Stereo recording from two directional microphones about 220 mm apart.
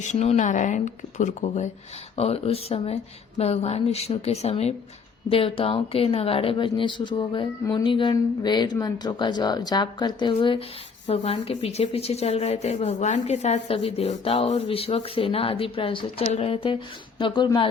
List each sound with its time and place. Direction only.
0.0 s a woman's voice: 30° left (ahead or behind)